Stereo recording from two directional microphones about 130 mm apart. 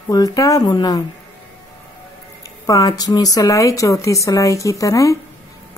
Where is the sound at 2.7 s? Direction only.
30° left (ahead or behind).